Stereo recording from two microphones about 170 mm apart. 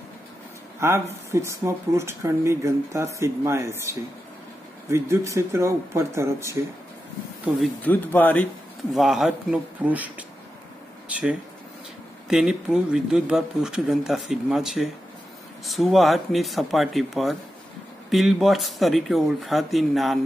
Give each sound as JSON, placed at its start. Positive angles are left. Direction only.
{"t": 0.7, "sound": "speech", "side_deg": -15}
{"t": 7.8, "sound": "speech", "side_deg": 10}
{"t": 8.9, "sound": "speech", "side_deg": 0}